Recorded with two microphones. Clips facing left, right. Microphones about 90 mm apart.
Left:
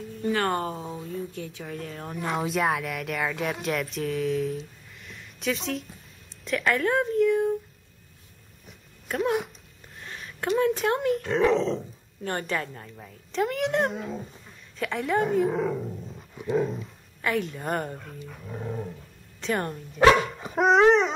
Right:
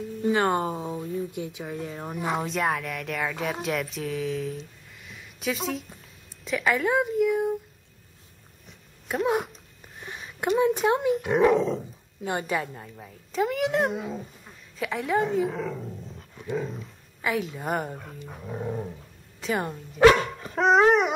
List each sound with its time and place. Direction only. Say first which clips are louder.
0.2 s speech: right 2 dB; 20° right (ahead or behind)
2.4 s speech: left 1 dB; centre (ahead or behind)
8.6 s a sound: even; centre (ahead or behind)
9.9 s a sound: right 1 dB; 15° right (ahead or behind)
10.8 s speech: right 2 dB; 5° right (ahead or behind)
15.5 s speech: left 5 dB; 15° left (ahead or behind); by 18.1 s 5° right (ahead or behind)
18.2 s speech: right 4 dB; 20° right (ahead or behind); by 20.1 s 5° right (ahead or behind)
20.3 s dog: left 2 dB; 15° left (ahead or behind)
20.6 s speech: left 1 dB; 5° right (ahead or behind)